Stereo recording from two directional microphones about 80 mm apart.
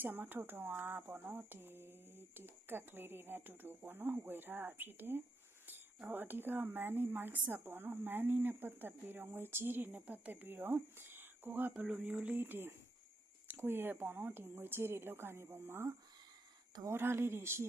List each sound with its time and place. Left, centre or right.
0.0 s a woman's voice: right